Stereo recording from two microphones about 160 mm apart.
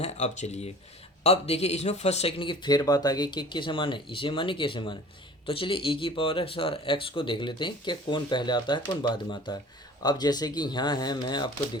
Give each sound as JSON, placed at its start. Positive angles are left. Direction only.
{"t": 0.0, "sound": "speech", "side_deg": 45}